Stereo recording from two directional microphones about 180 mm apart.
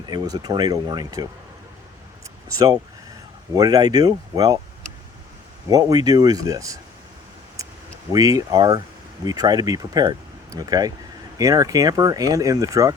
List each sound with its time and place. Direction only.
0.1 s speech: 20° right (ahead or behind)
2.5 s speech: 20° right (ahead or behind)
5.6 s speech: 20° right (ahead or behind)
8.1 s speech: 20° right (ahead or behind)